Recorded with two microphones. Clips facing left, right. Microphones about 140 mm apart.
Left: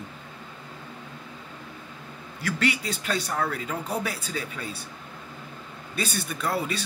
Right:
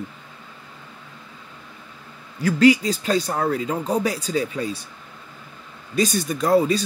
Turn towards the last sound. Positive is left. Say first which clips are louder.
# right 10 dB
turn(degrees=-35)  # may be behind; listen again after turning